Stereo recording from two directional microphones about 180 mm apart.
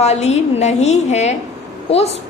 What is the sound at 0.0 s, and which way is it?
A woman's voice, 35° left (ahead or behind).